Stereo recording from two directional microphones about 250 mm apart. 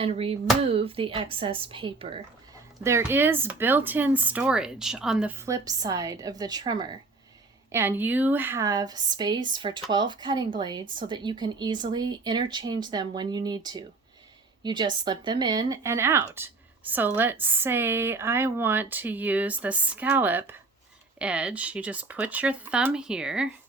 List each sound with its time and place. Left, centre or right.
0.0 s speech: right
2.8 s speech: centre